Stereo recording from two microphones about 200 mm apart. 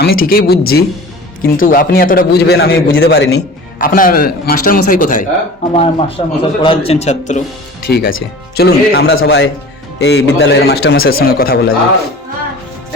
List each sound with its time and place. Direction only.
0.0 s a man's voice: 50° left (ahead or behind)
3.3 s a man's voice: 45° left (ahead or behind)
5.7 s a man's voice: 30° left (ahead or behind)
7.9 s a man's voice: 55° left (ahead or behind)